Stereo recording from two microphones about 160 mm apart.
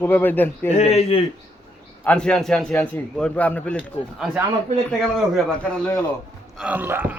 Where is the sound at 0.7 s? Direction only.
40° left (ahead or behind).